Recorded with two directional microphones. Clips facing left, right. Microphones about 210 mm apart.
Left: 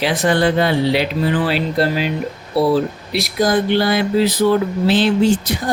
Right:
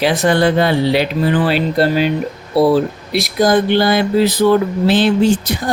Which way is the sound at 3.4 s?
45° right (ahead or behind).